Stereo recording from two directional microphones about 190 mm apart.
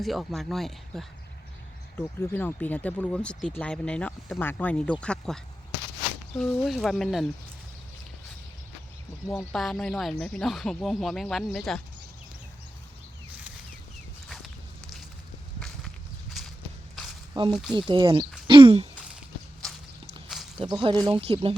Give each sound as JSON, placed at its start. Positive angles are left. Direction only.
{"t": 0.0, "sound": "speech", "side_deg": 0}
{"t": 6.4, "sound": "speech", "side_deg": 0}
{"t": 9.3, "sound": "speech", "side_deg": 0}
{"t": 16.4, "sound": "walk", "side_deg": 0}
{"t": 17.3, "sound": "speech", "side_deg": -25}
{"t": 20.6, "sound": "speech", "side_deg": -25}